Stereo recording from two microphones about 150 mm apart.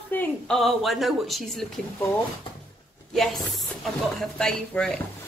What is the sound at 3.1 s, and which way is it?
Speech, centre (ahead or behind).